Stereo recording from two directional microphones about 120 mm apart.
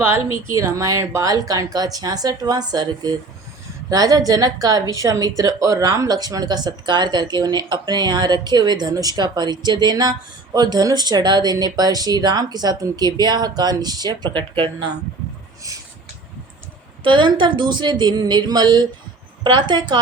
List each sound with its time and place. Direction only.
0.0 s speech: 20° right (ahead or behind); by 14.4 s 40° right (ahead or behind)
17.0 s speech: 40° right (ahead or behind)